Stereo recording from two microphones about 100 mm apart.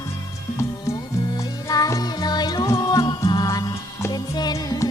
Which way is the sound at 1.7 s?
40° left (ahead or behind).